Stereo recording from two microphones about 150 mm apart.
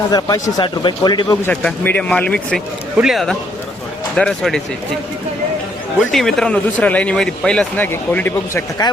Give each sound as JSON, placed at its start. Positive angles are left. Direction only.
{"t": 0.1, "sound": "a man's voice", "side_deg": 25}
{"t": 1.5, "sound": "a man's voice", "side_deg": 10}
{"t": 6.1, "sound": "a man's voice", "side_deg": 0}
{"t": 8.8, "sound": "a man's voice", "side_deg": 30}